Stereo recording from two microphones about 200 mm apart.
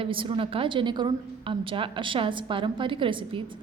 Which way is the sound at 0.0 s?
25° right (ahead or behind).